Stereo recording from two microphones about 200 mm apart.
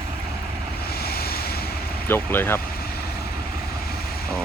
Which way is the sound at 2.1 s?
10° left (ahead or behind).